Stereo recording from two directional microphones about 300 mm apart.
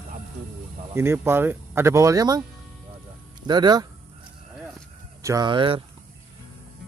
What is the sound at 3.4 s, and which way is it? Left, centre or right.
Speech, centre.